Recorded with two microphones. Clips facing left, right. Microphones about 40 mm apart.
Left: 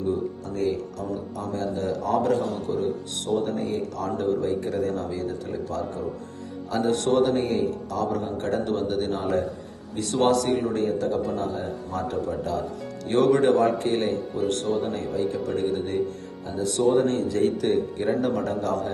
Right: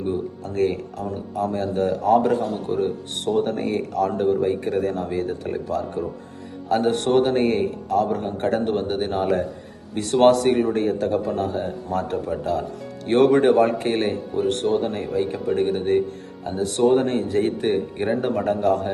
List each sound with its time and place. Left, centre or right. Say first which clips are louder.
0.0 s speech: right 1 dB; right
12.1 s speech: right 3 dB; right
17.1 s speech: right 2 dB; right